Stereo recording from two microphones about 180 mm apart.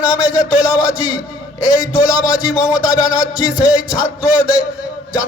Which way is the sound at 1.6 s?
20° left (ahead or behind).